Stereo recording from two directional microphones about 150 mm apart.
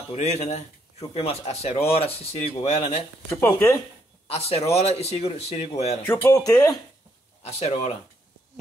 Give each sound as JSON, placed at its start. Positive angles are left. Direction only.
{"t": 0.1, "sound": "speech", "side_deg": 45}
{"t": 3.3, "sound": "speech", "side_deg": 15}
{"t": 4.3, "sound": "speech", "side_deg": 45}
{"t": 6.0, "sound": "speech", "side_deg": 20}
{"t": 7.4, "sound": "speech", "side_deg": 45}